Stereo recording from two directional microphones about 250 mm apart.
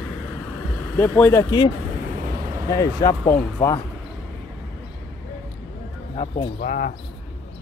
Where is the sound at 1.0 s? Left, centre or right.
Centre.